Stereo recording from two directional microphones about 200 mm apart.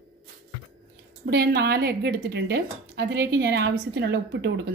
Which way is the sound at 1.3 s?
50° right (ahead or behind).